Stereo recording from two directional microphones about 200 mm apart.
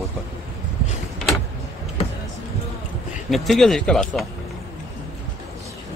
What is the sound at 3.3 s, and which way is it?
Speech, centre (ahead or behind).